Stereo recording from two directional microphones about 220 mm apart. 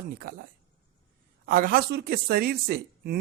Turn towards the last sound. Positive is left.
turn(degrees=-45)  # may be behind; listen again after turning